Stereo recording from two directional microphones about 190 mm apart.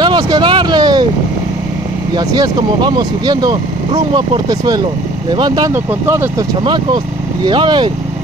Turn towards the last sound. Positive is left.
turn(degrees=-25)  # may be behind; listen again after turning